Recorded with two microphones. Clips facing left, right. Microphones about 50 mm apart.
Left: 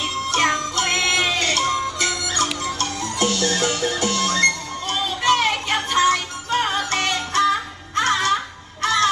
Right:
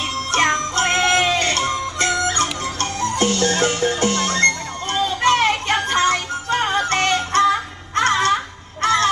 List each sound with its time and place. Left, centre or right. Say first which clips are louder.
0.3 s music: right 2 dB; right
8.8 s honk: right 2 dB; right